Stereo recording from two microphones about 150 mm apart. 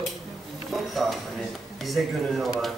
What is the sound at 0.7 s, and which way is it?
Speech, centre (ahead or behind).